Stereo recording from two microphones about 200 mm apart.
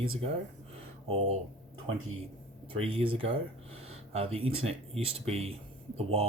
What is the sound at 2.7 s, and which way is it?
Speech, 30° right (ahead or behind).